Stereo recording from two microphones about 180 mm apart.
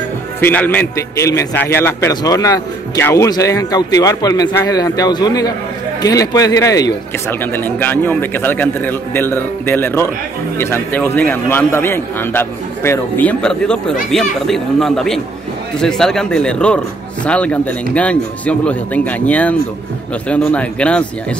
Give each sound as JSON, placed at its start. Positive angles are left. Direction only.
{"t": 0.4, "sound": "a man's voice", "side_deg": 10}